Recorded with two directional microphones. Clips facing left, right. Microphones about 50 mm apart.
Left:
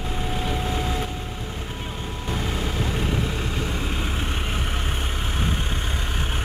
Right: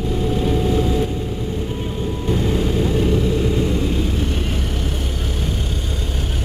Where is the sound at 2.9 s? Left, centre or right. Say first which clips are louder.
Right 8 dB; left.